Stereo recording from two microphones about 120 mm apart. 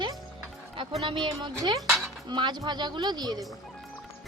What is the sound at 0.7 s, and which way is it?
Speech, 45° right (ahead or behind).